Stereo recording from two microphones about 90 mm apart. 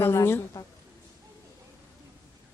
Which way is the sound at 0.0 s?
25° left (ahead or behind).